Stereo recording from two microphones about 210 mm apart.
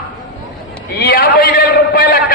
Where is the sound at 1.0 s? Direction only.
45° left (ahead or behind).